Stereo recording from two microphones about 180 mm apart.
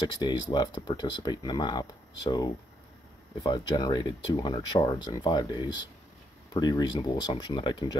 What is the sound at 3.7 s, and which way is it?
Speech, 25° left (ahead or behind).